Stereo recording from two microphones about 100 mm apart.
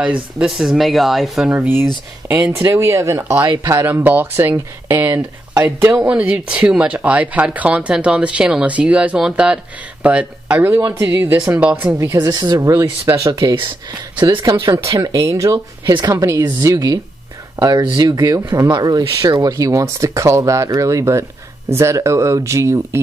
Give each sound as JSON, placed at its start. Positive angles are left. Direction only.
{"t": 0.0, "sound": "speech", "side_deg": -15}
{"t": 1.5, "sound": "speech", "side_deg": -20}
{"t": 6.0, "sound": "speech", "side_deg": -15}
{"t": 12.0, "sound": "speech", "side_deg": -30}
{"t": 13.3, "sound": "speech", "side_deg": -50}
{"t": 15.8, "sound": "speech", "side_deg": -45}